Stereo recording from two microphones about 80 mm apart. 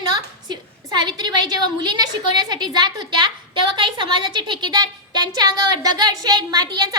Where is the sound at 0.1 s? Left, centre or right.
Right.